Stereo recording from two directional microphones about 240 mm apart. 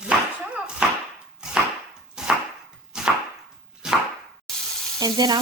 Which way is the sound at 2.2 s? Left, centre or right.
Centre.